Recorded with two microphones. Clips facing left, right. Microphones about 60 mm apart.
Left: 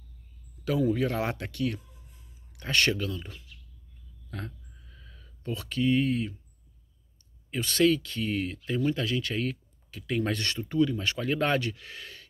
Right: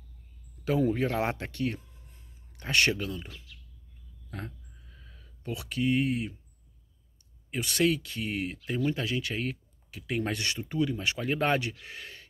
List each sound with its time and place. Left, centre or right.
0.7 s speech: right
4.3 s a sound: centre
7.5 s speech: centre